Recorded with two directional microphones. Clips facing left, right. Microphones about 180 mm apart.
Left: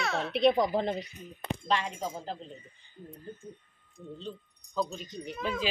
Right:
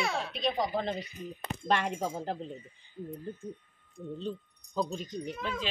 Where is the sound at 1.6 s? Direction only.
55° right (ahead or behind).